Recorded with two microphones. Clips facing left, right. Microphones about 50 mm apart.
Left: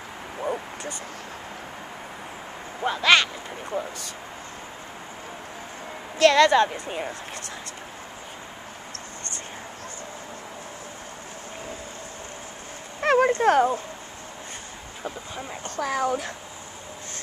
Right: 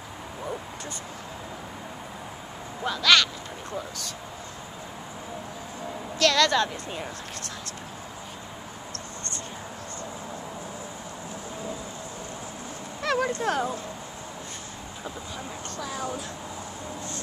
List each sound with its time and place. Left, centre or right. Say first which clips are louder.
2.8 s a woman's voice: left 2 dB; left
6.1 s a woman's voice: left 5 dB; left
13.0 s speech: left 7 dB; left
15.0 s speech: left 3 dB; left
15.8 s speech: left 8 dB; left